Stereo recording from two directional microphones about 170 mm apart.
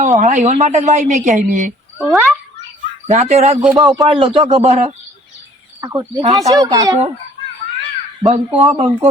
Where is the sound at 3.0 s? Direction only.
40° right (ahead or behind).